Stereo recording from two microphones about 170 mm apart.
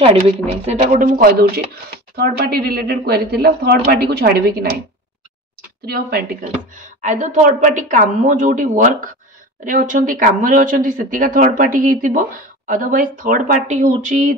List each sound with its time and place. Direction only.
0.0 s speech: 35° right (ahead or behind); by 4.6 s 65° right (ahead or behind)
5.9 s speech: 65° right (ahead or behind)
6.7 s speech: 45° right (ahead or behind)